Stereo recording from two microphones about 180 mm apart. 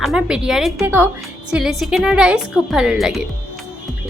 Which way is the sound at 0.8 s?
10° right (ahead or behind).